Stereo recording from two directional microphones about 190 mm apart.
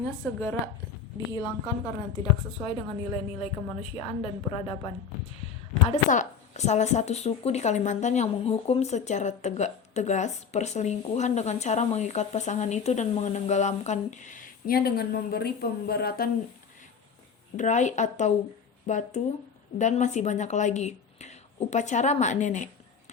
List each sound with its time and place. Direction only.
0.2 s a woman's voice: 10° left (ahead or behind)
1.3 s a woman's voice: 25° left (ahead or behind)
5.9 s speech: 40° left (ahead or behind)
17.6 s speech: 40° left (ahead or behind)